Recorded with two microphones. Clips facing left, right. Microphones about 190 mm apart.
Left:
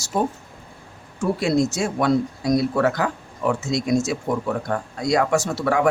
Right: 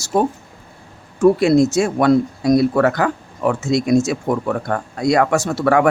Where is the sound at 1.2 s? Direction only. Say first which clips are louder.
Right 8 dB; 60° right (ahead or behind).